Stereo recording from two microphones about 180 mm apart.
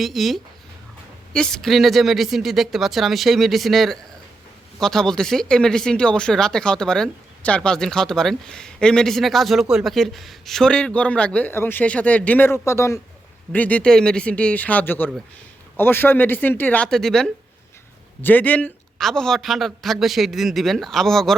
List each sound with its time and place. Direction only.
0.0 s speech: centre (ahead or behind)